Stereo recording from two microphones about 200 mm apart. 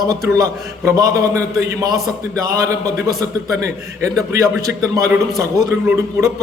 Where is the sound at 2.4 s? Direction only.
15° right (ahead or behind).